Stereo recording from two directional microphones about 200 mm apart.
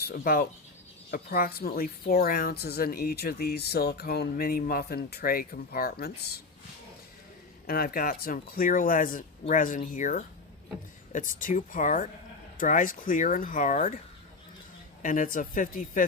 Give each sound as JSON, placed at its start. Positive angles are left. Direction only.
{"t": 0.1, "sound": "speech", "side_deg": 45}
{"t": 7.7, "sound": "speech", "side_deg": 50}
{"t": 15.0, "sound": "speech", "side_deg": 40}